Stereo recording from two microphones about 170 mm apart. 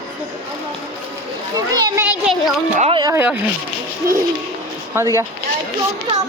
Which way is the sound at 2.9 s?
25° right (ahead or behind).